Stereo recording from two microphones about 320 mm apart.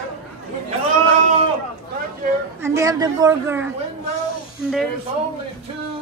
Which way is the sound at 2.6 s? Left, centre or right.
Centre.